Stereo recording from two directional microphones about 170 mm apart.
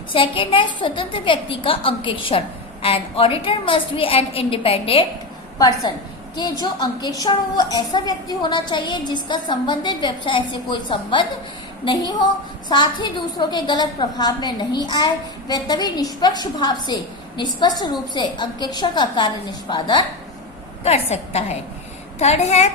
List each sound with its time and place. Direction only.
0.1 s a woman's voice: 30° left (ahead or behind)
6.3 s a woman's voice: 25° left (ahead or behind)
20.8 s a woman's voice: 40° left (ahead or behind)